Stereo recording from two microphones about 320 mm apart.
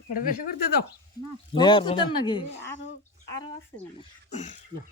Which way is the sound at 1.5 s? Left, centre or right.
Centre.